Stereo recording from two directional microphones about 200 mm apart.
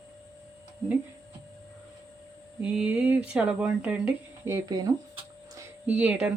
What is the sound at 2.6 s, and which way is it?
Speech, 5° right (ahead or behind).